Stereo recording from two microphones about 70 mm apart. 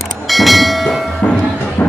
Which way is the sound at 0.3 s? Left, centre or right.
Centre.